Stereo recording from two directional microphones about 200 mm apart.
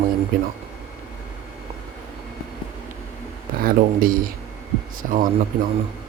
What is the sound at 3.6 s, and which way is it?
Speech, 45° right (ahead or behind).